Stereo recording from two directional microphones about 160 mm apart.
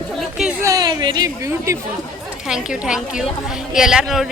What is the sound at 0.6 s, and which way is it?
Speech, 25° right (ahead or behind).